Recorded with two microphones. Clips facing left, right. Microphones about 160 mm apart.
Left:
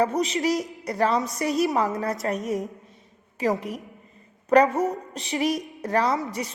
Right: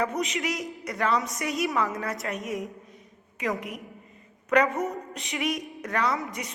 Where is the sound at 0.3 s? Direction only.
40° left (ahead or behind).